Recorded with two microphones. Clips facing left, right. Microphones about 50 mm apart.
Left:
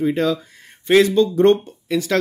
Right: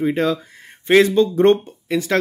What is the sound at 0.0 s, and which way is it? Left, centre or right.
Speech, right.